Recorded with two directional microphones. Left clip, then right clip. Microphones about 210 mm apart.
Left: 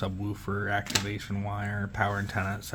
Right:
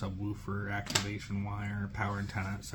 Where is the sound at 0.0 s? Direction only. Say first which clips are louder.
Left 6 dB; 50° left (ahead or behind).